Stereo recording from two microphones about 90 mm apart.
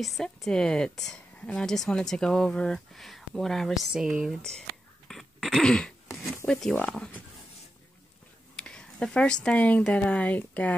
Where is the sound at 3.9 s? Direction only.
5° right (ahead or behind).